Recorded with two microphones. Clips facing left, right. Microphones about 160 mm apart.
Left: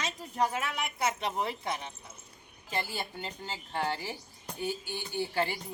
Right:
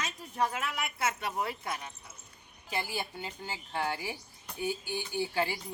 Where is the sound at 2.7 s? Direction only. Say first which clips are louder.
Even; 10° right (ahead or behind).